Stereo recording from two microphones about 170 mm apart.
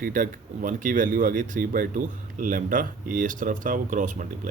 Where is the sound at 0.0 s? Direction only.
55° right (ahead or behind).